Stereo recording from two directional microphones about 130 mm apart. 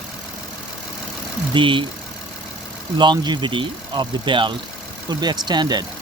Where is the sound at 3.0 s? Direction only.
35° right (ahead or behind).